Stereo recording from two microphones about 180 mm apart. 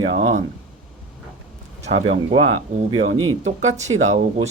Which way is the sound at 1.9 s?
35° right (ahead or behind).